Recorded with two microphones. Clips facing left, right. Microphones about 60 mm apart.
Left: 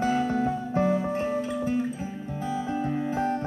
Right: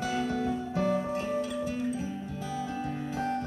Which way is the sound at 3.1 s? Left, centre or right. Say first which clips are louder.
Left 2 dB; left.